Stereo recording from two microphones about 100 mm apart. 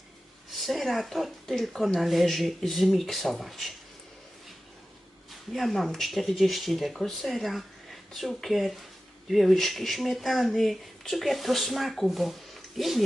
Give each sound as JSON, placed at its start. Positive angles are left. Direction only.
{"t": 0.5, "sound": "speech", "side_deg": 0}
{"t": 5.3, "sound": "speech", "side_deg": 0}